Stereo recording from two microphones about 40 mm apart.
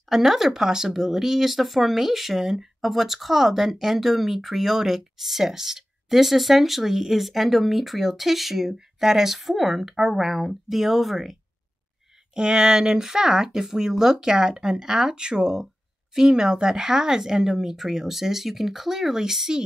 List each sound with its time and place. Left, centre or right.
0.1 s speech: centre
12.4 s speech: centre